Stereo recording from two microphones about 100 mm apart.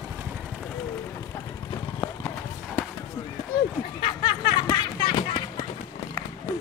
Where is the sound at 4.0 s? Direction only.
55° left (ahead or behind).